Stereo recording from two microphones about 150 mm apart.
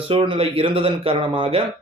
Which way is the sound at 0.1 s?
35° right (ahead or behind).